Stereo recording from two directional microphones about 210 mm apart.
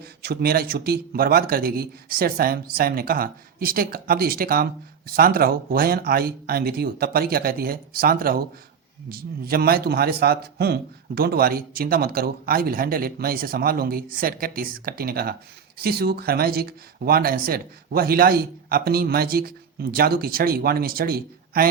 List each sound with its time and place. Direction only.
0.0 s a man's voice: 45° right (ahead or behind)